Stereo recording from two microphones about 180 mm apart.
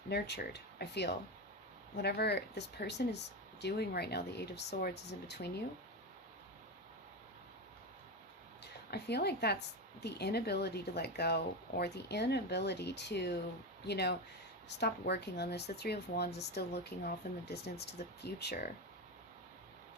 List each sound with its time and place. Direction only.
0.1 s speech: 65° left (ahead or behind)
8.9 s speech: 65° left (ahead or behind)